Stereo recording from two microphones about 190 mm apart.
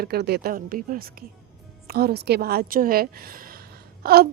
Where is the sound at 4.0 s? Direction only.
55° right (ahead or behind).